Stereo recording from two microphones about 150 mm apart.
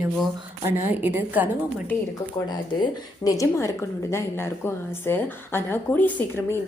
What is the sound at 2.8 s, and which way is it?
A woman's voice, 25° left (ahead or behind).